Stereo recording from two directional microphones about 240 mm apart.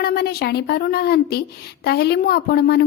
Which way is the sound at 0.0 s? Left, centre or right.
Left.